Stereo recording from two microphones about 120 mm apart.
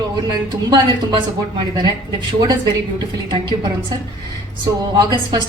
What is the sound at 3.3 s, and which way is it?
A woman's voice, 35° right (ahead or behind).